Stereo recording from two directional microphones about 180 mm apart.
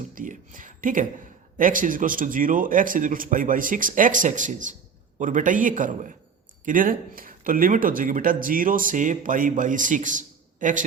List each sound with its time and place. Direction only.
0.1 s speech: 50° right (ahead or behind)